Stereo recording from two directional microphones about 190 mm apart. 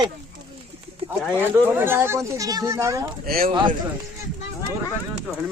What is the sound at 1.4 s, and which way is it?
Speech, 10° right (ahead or behind).